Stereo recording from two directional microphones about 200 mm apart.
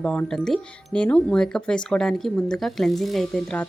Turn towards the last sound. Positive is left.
turn(degrees=5)  # may be behind; listen again after turning